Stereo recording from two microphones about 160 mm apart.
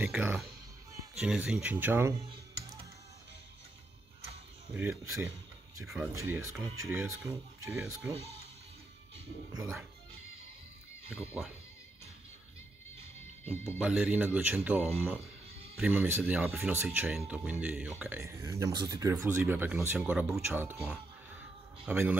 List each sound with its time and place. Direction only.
0.0 s music: 10° right (ahead or behind)
1.1 s speech: 5° right (ahead or behind)
4.7 s speech: 15° right (ahead or behind)
7.7 s speech: 5° right (ahead or behind)
9.5 s speech: 20° right (ahead or behind)
11.1 s speech: 15° left (ahead or behind)
13.7 s speech: 5° right (ahead or behind)
21.8 s speech: 10° right (ahead or behind)